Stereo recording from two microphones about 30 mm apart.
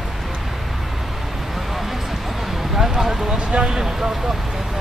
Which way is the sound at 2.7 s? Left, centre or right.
Centre.